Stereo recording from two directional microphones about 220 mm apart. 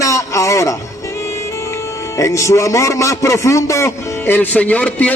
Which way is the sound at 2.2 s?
15° left (ahead or behind).